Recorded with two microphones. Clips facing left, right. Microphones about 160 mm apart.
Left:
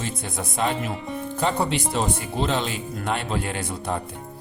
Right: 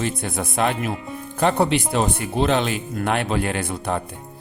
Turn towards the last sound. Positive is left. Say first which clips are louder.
# right 3 dB
turn(degrees=-60)  # may be behind; listen again after turning